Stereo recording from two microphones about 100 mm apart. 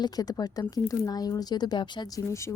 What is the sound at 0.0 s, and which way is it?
Speech, 40° left (ahead or behind).